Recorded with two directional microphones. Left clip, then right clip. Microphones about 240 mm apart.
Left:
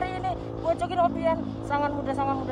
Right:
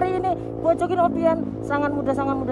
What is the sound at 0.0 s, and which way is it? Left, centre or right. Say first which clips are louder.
Speech: right 7 dB; centre.